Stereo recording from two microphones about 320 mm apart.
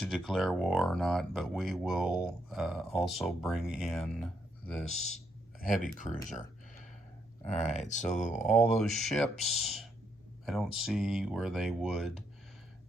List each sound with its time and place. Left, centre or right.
0.0 s speech: centre
5.8 s speech: left
7.4 s speech: left
8.4 s speech: centre